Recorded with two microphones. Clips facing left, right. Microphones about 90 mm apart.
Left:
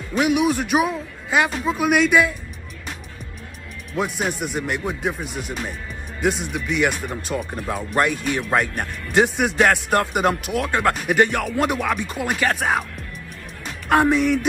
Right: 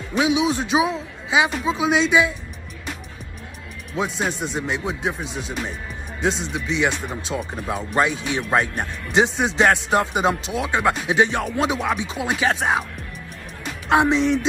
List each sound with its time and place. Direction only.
0.2 s speech: 20° right (ahead or behind)
3.9 s speech: 20° right (ahead or behind)
13.8 s speech: 20° right (ahead or behind)